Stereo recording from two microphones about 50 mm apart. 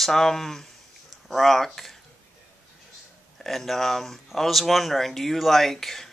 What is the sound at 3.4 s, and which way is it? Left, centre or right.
Speech, centre.